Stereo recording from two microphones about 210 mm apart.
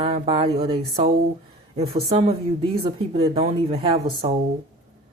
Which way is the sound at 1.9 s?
25° right (ahead or behind).